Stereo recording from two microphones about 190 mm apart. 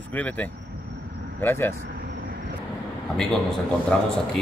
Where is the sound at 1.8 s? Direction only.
50° right (ahead or behind).